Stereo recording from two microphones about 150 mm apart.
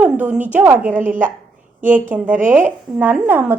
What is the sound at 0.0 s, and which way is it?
A woman's voice, 10° right (ahead or behind).